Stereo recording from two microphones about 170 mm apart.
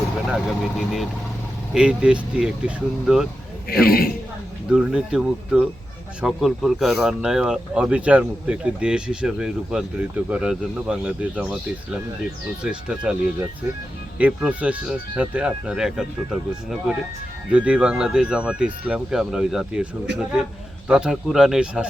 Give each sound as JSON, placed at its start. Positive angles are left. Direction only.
{"t": 0.3, "sound": "speech", "side_deg": 0}
{"t": 3.7, "sound": "a man's voice", "side_deg": 65}
{"t": 4.7, "sound": "speech", "side_deg": -5}
{"t": 12.6, "sound": "speech", "side_deg": -5}
{"t": 14.2, "sound": "speech", "side_deg": -10}